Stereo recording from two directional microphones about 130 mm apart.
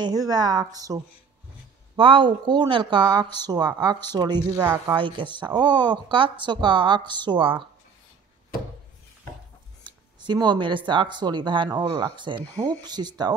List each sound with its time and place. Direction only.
0.0 s speech: 30° right (ahead or behind)
2.0 s speech: 40° right (ahead or behind)
10.2 s speech: 35° right (ahead or behind)